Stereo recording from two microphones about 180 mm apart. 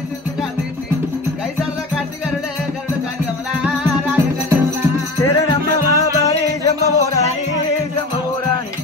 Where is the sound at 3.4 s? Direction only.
10° right (ahead or behind).